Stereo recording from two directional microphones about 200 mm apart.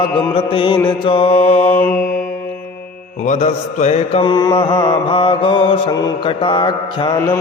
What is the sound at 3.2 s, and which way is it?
Mantra, 40° left (ahead or behind).